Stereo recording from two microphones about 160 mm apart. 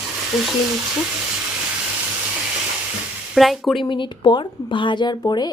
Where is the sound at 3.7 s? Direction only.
30° left (ahead or behind).